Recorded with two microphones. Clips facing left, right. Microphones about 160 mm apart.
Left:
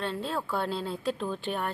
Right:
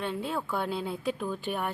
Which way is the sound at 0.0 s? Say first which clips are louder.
Even; 15° right (ahead or behind).